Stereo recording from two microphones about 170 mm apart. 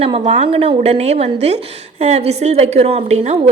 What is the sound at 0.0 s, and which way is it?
A woman's voice, 40° right (ahead or behind).